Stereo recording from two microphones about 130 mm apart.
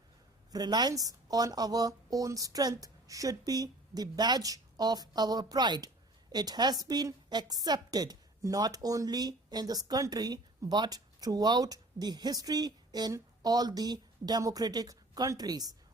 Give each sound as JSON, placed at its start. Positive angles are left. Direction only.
{"t": 0.5, "sound": "a woman's voice", "side_deg": -30}